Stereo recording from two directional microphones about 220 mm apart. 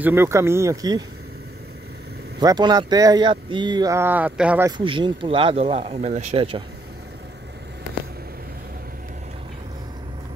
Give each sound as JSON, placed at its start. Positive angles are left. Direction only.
{"t": 0.0, "sound": "speech", "side_deg": -10}
{"t": 2.4, "sound": "speech", "side_deg": -20}
{"t": 4.6, "sound": "speech", "side_deg": -20}